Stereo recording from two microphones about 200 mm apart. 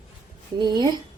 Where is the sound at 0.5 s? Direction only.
20° right (ahead or behind).